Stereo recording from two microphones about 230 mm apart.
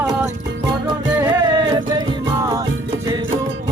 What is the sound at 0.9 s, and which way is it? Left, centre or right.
Music, centre.